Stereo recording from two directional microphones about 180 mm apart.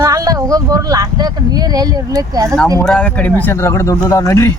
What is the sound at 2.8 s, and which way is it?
Speech, 5° left (ahead or behind).